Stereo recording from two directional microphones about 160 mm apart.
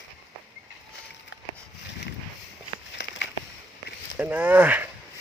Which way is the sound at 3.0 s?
90° left.